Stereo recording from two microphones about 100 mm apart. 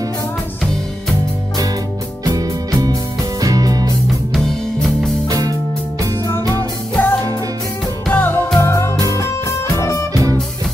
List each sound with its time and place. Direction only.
2.2 s music: 40° right (ahead or behind)
4.3 s music: centre (ahead or behind)
5.3 s music: 35° right (ahead or behind)
7.0 s music: 15° left (ahead or behind)